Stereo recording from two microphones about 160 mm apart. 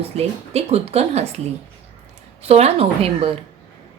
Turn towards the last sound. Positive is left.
turn(degrees=-35)  # may be behind; listen again after turning